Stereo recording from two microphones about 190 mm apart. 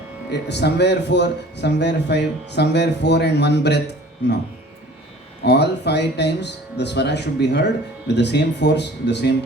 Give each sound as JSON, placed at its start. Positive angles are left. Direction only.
{"t": 0.3, "sound": "speech", "side_deg": 65}
{"t": 5.5, "sound": "speech", "side_deg": 65}